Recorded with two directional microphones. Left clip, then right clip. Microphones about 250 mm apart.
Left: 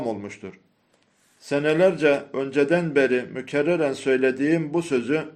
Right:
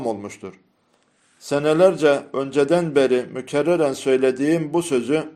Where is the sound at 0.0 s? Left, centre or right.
Right.